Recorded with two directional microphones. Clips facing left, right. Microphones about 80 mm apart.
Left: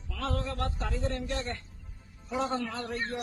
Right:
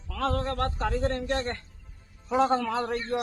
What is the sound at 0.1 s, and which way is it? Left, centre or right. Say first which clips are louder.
A man's voice: right 5 dB; right.